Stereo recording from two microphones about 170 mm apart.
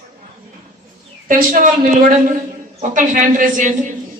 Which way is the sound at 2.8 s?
50° right (ahead or behind).